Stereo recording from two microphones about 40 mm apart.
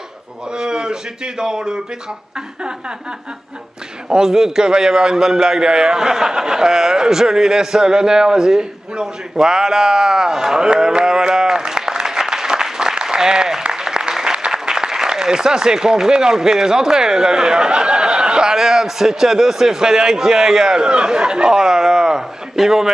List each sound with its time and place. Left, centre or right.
0.5 s a man's voice: centre
4.1 s a man's voice: centre